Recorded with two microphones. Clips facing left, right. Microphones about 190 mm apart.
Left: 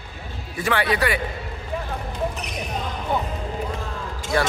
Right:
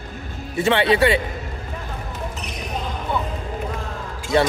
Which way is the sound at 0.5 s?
25° right (ahead or behind).